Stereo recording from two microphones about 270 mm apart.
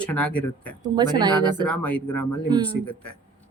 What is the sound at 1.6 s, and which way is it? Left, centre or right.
Speech, centre.